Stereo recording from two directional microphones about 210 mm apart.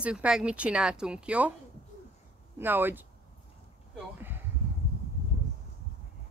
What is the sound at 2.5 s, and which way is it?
Speech, 10° right (ahead or behind).